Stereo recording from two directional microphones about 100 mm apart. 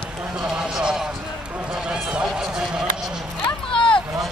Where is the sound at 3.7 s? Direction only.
60° left (ahead or behind).